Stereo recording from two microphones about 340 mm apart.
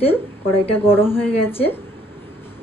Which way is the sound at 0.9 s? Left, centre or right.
Centre.